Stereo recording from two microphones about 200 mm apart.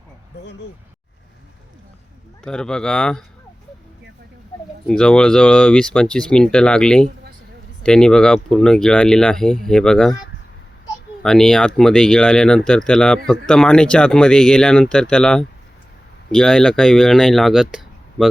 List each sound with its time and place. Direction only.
2.4 s speech: 5° left (ahead or behind)
4.9 s speech: 5° left (ahead or behind)
11.2 s speech: 5° left (ahead or behind)